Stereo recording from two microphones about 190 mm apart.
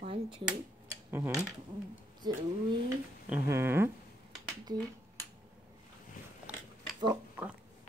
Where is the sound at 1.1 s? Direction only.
10° right (ahead or behind).